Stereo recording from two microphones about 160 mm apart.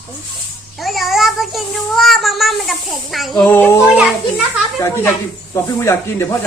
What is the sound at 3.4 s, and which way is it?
Speech, 10° left (ahead or behind).